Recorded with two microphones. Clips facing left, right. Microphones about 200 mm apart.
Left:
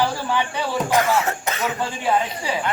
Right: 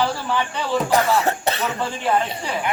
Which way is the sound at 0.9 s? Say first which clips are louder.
Even; 35° right (ahead or behind).